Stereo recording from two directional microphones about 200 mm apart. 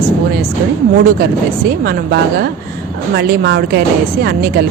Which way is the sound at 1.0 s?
50° right (ahead or behind).